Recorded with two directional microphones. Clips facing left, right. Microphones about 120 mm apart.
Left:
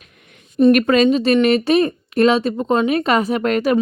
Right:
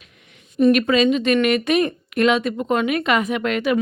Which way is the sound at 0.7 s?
50° left (ahead or behind).